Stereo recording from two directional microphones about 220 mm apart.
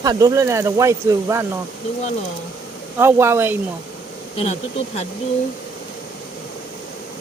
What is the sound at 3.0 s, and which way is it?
Speech, 10° right (ahead or behind).